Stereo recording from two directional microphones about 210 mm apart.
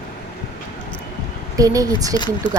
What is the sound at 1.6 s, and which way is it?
Speech, 15° right (ahead or behind).